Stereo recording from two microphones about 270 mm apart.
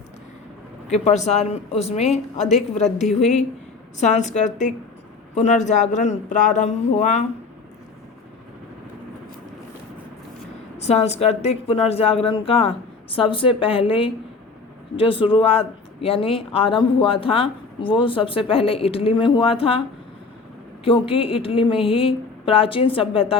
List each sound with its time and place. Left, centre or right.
0.9 s speech: left
4.0 s speech: left
10.8 s speech: left
20.8 s speech: centre